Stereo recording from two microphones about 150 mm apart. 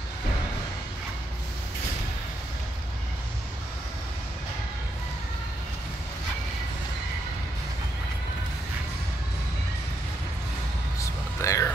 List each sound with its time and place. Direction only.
11.0 s music: 20° left (ahead or behind)